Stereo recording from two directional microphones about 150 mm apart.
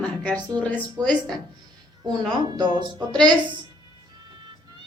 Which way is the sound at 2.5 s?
30° right (ahead or behind).